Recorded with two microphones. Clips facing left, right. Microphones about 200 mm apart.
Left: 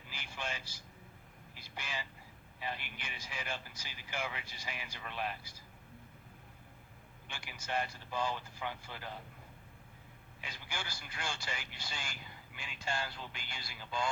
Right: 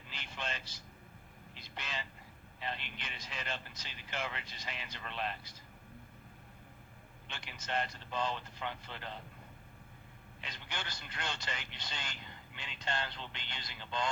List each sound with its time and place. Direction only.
0.1 s vehicle: 10° left (ahead or behind)
1.5 s a sound: 10° left (ahead or behind)
2.6 s speech: 10° left (ahead or behind)
7.3 s speech: 10° left (ahead or behind)
10.4 s speech: 10° left (ahead or behind)